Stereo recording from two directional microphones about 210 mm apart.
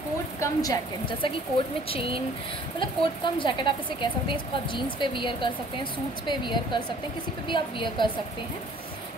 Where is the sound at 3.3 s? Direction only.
20° left (ahead or behind).